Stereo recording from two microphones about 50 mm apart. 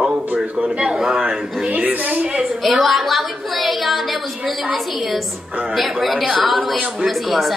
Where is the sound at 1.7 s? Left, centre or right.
Right.